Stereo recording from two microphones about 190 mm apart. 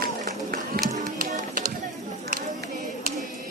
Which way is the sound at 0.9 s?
45° right (ahead or behind).